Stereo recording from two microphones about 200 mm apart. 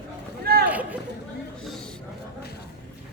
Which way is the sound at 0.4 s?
50° right (ahead or behind).